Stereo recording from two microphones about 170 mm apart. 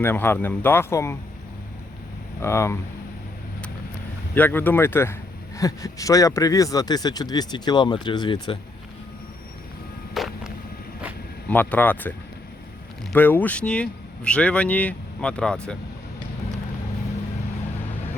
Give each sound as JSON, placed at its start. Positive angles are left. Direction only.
{"t": 0.0, "sound": "speech", "side_deg": 10}
{"t": 2.4, "sound": "speech", "side_deg": 15}
{"t": 4.4, "sound": "speech", "side_deg": 10}
{"t": 10.2, "sound": "vehicle", "side_deg": 0}
{"t": 11.4, "sound": "speech", "side_deg": 10}
{"t": 13.1, "sound": "speech", "side_deg": 10}